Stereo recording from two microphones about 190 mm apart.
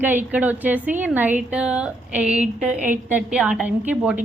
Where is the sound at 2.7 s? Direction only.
40° right (ahead or behind).